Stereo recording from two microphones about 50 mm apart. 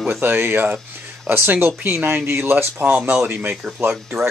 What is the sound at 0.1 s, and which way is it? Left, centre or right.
Speech, right.